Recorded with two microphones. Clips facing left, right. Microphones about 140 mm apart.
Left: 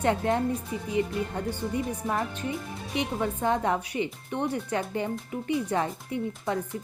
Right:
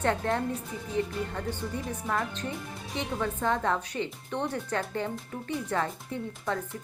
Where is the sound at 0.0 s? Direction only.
15° left (ahead or behind).